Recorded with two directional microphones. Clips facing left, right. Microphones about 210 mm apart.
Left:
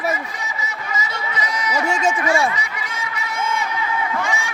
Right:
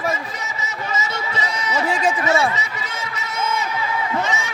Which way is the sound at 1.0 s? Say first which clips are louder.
Even; 25° right (ahead or behind).